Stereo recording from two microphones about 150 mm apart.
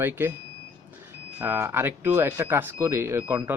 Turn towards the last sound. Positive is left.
turn(degrees=-15)  # may be behind; listen again after turning